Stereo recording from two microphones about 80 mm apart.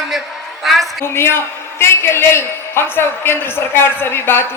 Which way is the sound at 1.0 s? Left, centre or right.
Left.